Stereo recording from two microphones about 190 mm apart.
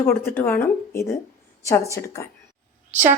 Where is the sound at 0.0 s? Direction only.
15° left (ahead or behind).